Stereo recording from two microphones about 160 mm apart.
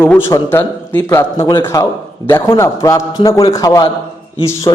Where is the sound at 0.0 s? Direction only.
10° left (ahead or behind).